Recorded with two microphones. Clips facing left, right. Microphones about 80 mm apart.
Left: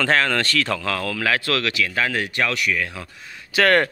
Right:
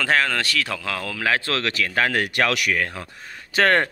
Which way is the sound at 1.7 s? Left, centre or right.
Right.